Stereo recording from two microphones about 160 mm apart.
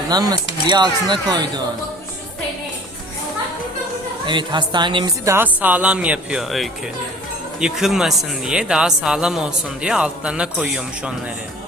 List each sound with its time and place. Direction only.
0.1 s speech: 25° right (ahead or behind)
4.3 s speech: 30° right (ahead or behind)
5.2 s speech: 15° right (ahead or behind)